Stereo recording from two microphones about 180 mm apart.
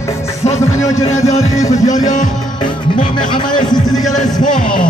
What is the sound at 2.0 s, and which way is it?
Music, 45° left (ahead or behind).